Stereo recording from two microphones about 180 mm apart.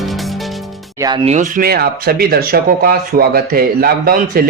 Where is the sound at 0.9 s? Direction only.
20° right (ahead or behind).